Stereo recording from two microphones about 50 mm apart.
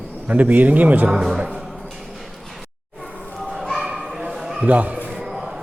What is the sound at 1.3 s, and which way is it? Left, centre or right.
Speech, right.